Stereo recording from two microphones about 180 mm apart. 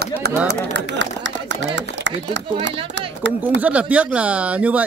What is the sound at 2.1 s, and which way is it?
Run, 85° right.